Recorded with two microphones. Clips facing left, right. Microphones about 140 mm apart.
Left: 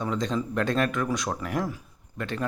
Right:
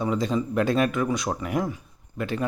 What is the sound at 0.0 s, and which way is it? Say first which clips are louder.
Speech: right 3 dB; 5° right (ahead or behind).